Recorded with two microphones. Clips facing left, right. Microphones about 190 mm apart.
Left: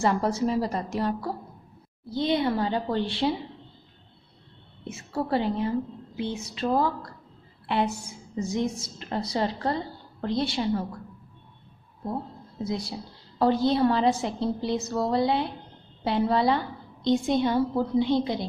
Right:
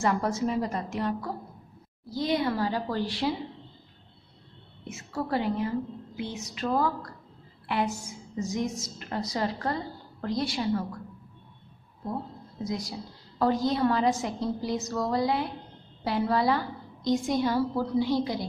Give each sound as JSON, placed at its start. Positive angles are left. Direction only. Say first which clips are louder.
{"t": 0.0, "sound": "a woman's voice", "louder": "left 2 dB", "side_deg": 30}
{"t": 4.8, "sound": "a woman's voice", "louder": "left 3 dB", "side_deg": 30}
{"t": 12.6, "sound": "a woman's voice", "louder": "left 2 dB", "side_deg": 30}